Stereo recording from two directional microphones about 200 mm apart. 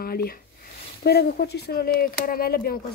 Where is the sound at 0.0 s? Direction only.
50° left (ahead or behind).